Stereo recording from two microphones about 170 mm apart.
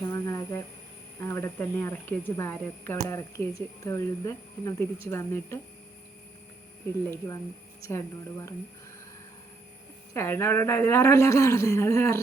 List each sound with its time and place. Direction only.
0.0 s a sound: 20° left (ahead or behind)
1.2 s a woman's voice: 15° left (ahead or behind)
7.9 s a woman's voice: 15° left (ahead or behind)
10.2 s a woman's voice: 15° left (ahead or behind)